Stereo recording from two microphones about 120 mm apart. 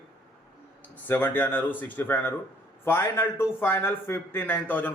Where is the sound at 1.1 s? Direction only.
15° left (ahead or behind).